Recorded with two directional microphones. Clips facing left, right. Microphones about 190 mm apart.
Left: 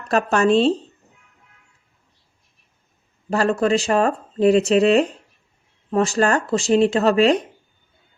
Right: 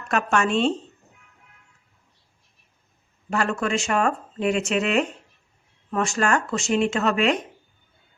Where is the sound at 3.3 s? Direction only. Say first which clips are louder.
Left 6 dB; 35° left (ahead or behind).